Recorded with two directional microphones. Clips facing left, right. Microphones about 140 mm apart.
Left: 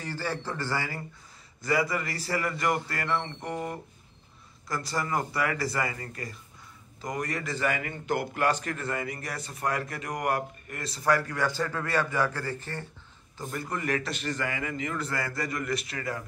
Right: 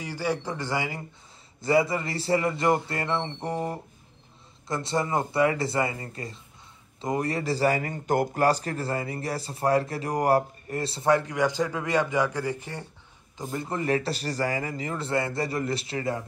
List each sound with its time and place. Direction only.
0.0 s a man's voice: 15° right (ahead or behind)